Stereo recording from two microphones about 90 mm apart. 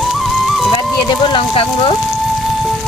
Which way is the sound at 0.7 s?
60° left (ahead or behind).